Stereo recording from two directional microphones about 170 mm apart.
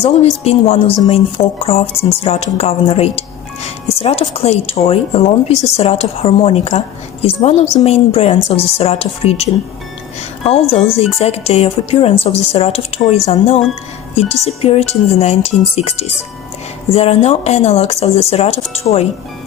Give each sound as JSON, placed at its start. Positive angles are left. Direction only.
{"t": 0.0, "sound": "speech", "side_deg": 35}
{"t": 10.9, "sound": "speech", "side_deg": 35}